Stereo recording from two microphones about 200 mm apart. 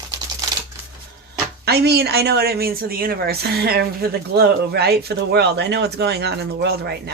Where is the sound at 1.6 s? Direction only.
55° right (ahead or behind).